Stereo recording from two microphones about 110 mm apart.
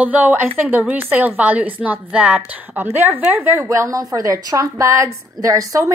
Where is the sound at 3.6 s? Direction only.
30° right (ahead or behind).